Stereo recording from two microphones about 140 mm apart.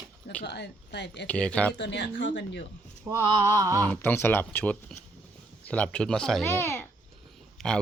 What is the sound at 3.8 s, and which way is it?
Speech, 15° left (ahead or behind).